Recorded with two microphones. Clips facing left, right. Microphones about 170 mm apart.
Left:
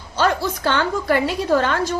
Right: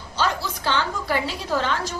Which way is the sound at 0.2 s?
55° left (ahead or behind).